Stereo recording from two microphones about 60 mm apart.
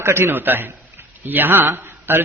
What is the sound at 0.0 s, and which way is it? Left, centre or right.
A man's voice, right.